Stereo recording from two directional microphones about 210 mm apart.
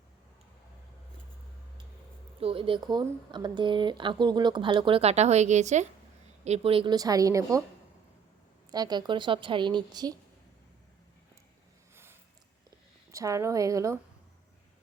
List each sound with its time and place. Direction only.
2.4 s a woman's voice: 25° right (ahead or behind)
8.7 s speech: 20° right (ahead or behind)
13.1 s a woman's voice: 15° right (ahead or behind)